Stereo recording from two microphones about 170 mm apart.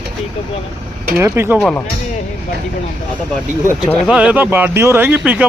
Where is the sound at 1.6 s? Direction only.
5° left (ahead or behind).